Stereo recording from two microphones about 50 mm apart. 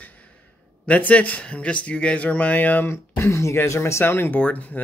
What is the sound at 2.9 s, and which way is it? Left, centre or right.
Speech, left.